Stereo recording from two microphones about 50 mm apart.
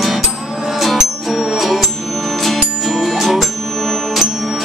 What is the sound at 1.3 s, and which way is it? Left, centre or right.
Music, centre.